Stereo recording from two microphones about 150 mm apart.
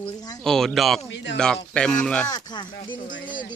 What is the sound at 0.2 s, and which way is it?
Speech, 25° left (ahead or behind).